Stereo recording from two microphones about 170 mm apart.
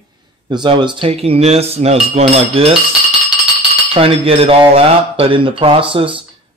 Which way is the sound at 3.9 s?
30° right (ahead or behind).